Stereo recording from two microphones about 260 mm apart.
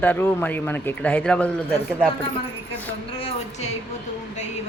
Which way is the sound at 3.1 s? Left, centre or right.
Left.